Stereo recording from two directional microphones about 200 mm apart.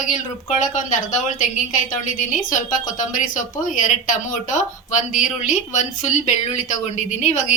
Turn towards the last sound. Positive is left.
turn(degrees=35)  # may be behind; listen again after turning